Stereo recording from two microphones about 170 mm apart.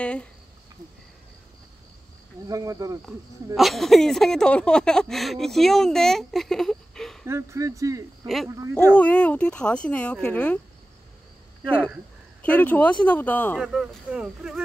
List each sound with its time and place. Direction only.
0.0 s speech: 5° left (ahead or behind)
2.4 s speech: 20° right (ahead or behind)
3.5 s speech: centre (ahead or behind)
7.2 s speech: 15° right (ahead or behind)
8.9 s speech: 10° left (ahead or behind)
12.4 s speech: 10° left (ahead or behind)
13.6 s speech: 5° right (ahead or behind)